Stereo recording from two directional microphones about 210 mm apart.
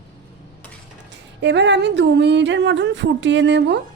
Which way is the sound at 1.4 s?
55° right (ahead or behind).